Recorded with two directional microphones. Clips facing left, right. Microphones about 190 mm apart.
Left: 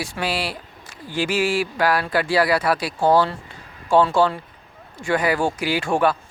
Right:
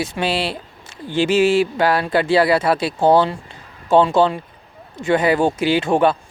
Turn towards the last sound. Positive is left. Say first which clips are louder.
# right 4 dB
turn(degrees=-20)  # may be behind; listen again after turning